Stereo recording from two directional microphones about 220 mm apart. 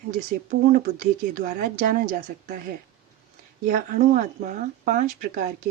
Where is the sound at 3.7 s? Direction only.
35° right (ahead or behind).